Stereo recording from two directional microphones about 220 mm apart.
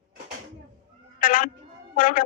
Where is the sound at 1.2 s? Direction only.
40° left (ahead or behind).